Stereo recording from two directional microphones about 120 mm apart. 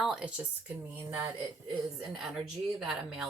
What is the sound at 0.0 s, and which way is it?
A woman's voice, 5° right (ahead or behind).